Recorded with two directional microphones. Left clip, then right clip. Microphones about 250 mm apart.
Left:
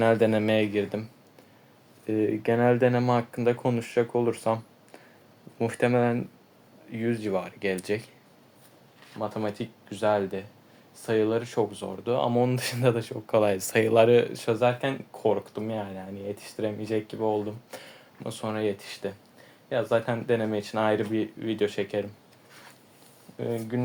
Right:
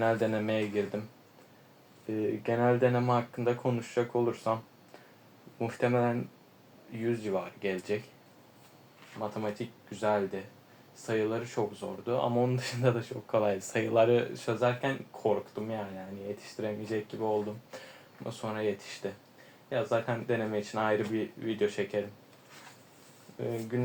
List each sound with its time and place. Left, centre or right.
0.0 s speech: left
2.0 s speech: left
5.5 s speech: left
9.2 s speech: left
23.4 s speech: left